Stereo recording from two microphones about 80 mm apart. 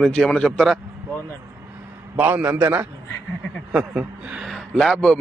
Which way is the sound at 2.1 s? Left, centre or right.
Right.